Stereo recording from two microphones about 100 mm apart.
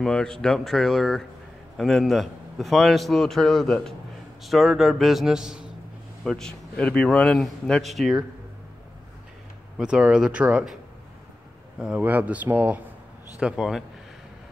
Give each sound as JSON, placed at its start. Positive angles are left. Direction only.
{"t": 0.0, "sound": "a man's voice", "side_deg": 5}
{"t": 6.2, "sound": "a man's voice", "side_deg": 5}
{"t": 9.8, "sound": "speech", "side_deg": -5}
{"t": 12.0, "sound": "a man's voice", "side_deg": -15}